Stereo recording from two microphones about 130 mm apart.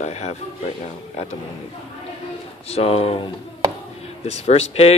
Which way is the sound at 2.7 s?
50° left (ahead or behind).